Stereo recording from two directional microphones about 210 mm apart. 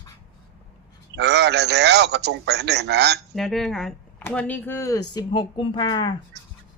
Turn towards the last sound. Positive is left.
turn(degrees=20)  # may be behind; listen again after turning